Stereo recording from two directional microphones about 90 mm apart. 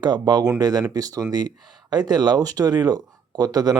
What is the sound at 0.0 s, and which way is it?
Speech, 50° right (ahead or behind).